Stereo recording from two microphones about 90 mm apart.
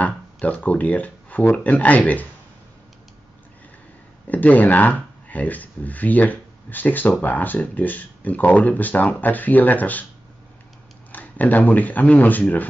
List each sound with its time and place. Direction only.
0.0 s speech: 15° left (ahead or behind)
4.3 s speech: 20° left (ahead or behind)
11.1 s speech: 20° left (ahead or behind)